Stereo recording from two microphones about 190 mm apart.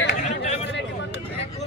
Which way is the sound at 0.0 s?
40° left (ahead or behind).